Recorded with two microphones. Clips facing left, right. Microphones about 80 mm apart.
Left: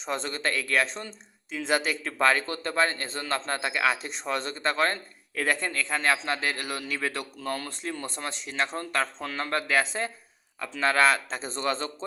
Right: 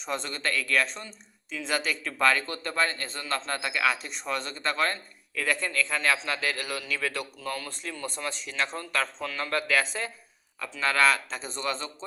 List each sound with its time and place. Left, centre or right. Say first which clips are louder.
0.0 s a man's voice: left 2 dB; left
7.5 s speech: left 6 dB; left
8.0 s a man's voice: right 1 dB; left